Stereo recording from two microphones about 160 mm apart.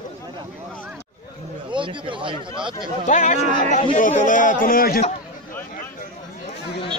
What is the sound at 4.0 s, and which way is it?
Speech, 55° left (ahead or behind).